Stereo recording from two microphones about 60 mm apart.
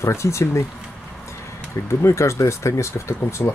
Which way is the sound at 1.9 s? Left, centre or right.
Left.